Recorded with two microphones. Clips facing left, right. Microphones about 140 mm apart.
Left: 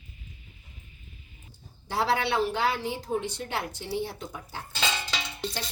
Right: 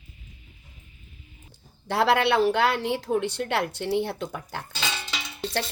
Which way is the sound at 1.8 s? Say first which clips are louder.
Right 5 dB; 70° right (ahead or behind).